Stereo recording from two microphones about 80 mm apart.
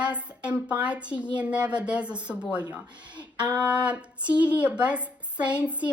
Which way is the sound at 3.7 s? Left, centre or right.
Centre.